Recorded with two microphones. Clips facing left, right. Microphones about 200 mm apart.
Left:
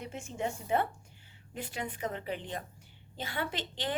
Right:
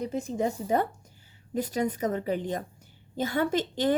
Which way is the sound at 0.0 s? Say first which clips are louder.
Right 8 dB; 35° right (ahead or behind).